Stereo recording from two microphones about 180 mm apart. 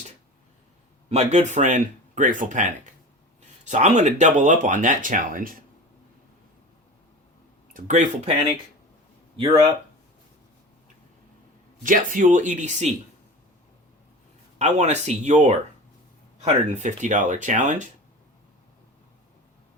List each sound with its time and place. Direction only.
1.1 s speech: 40° right (ahead or behind)
7.7 s speech: 45° right (ahead or behind)
11.8 s speech: 45° right (ahead or behind)
14.6 s speech: 40° right (ahead or behind)